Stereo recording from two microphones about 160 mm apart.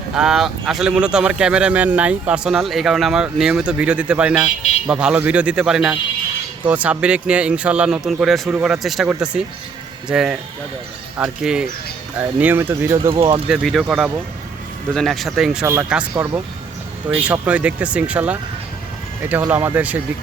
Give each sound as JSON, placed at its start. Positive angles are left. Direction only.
{"t": 0.2, "sound": "a man's voice", "side_deg": -5}
{"t": 13.1, "sound": "speech", "side_deg": -35}
{"t": 13.5, "sound": "speech", "side_deg": 0}
{"t": 15.6, "sound": "a man's voice", "side_deg": -15}